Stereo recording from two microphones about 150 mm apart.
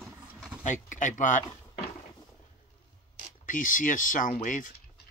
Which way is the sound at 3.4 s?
60° left (ahead or behind).